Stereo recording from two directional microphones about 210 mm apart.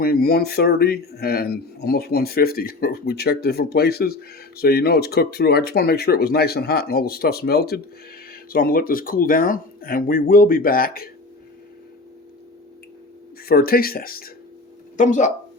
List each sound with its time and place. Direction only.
0.0 s speech: 45° left (ahead or behind)
13.4 s speech: 45° left (ahead or behind)